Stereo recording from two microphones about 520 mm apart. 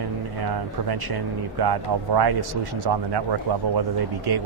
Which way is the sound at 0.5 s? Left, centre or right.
Right.